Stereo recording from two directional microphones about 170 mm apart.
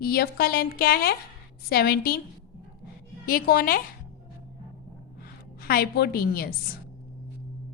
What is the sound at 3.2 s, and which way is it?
Speech, 60° left (ahead or behind).